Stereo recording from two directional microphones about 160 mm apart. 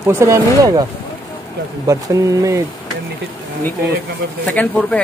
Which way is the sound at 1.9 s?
20° right (ahead or behind).